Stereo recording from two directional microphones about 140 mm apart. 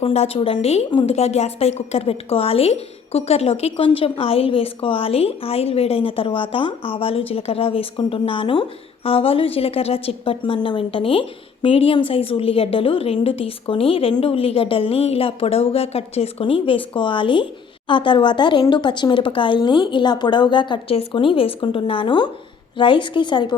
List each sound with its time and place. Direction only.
0.0 s a woman's voice: 45° left (ahead or behind)